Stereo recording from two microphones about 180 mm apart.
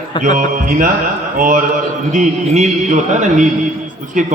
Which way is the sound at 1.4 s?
50° right (ahead or behind).